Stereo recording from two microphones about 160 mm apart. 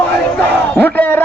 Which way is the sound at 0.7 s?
10° left (ahead or behind).